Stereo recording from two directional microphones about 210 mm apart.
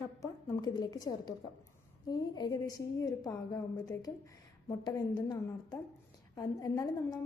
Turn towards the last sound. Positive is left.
turn(degrees=20)  # may be behind; listen again after turning